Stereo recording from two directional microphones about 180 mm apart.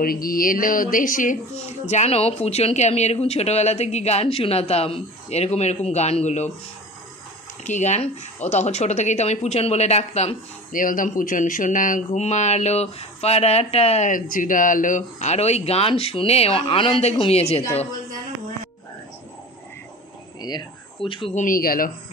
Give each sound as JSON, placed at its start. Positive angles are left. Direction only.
{"t": 0.0, "sound": "speech", "side_deg": 55}
{"t": 1.9, "sound": "speech", "side_deg": 35}
{"t": 7.6, "sound": "speech", "side_deg": 40}
{"t": 20.3, "sound": "speech", "side_deg": 25}
{"t": 21.4, "sound": "speech", "side_deg": 50}